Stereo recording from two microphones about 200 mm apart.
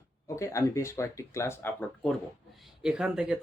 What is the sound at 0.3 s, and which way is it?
Speech, 15° left (ahead or behind).